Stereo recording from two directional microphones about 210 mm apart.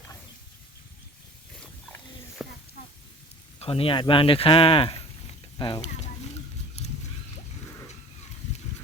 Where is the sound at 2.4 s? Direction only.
Centre (ahead or behind).